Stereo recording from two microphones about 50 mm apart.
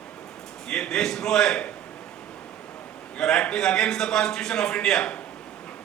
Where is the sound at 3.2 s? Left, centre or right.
Centre.